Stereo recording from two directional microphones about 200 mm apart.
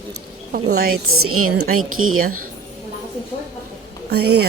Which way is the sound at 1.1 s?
90° right.